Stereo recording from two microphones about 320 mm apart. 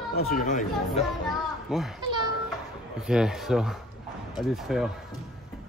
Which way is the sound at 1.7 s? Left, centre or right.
Centre.